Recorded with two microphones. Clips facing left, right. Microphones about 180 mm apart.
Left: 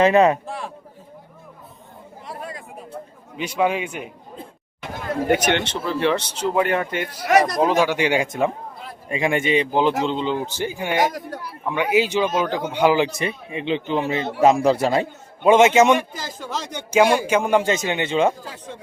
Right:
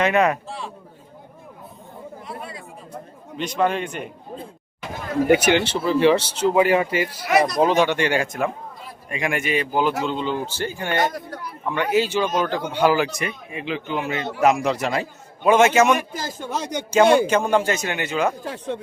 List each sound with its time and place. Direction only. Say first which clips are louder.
0.0 s speech: left 4 dB; 30° left (ahead or behind)
0.4 s a sound: left 2 dB; 50° left (ahead or behind)
2.2 s chatter: left 3 dB; 40° left (ahead or behind)
3.3 s speech: even; 10° left (ahead or behind)
5.3 s a man's voice: right 3 dB; 5° right (ahead or behind); by 15.0 s 30° left (ahead or behind)
15.4 s speech: left 2 dB; 20° left (ahead or behind)
16.2 s speech: right 2 dB; 55° right (ahead or behind)
17.2 s speech: left 1 dB; 10° left (ahead or behind)
18.4 s speech: right 8 dB; 65° right (ahead or behind)